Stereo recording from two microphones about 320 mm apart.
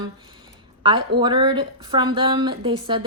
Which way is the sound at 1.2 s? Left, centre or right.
Centre.